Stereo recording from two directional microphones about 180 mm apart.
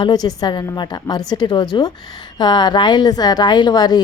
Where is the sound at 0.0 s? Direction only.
25° left (ahead or behind).